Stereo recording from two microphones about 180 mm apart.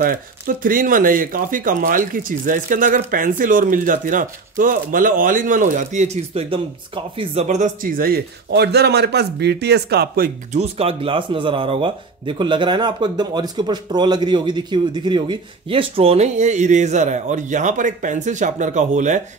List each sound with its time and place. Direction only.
0.0 s a man's voice: 50° right (ahead or behind)
10.6 s a man's voice: 30° right (ahead or behind)